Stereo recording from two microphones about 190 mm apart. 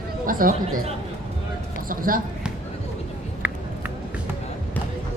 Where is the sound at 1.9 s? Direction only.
45° right (ahead or behind).